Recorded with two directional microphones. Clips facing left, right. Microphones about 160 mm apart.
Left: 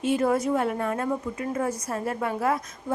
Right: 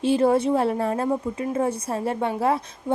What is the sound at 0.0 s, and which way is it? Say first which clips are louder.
A woman's voice: right 4 dB; 30° right (ahead or behind).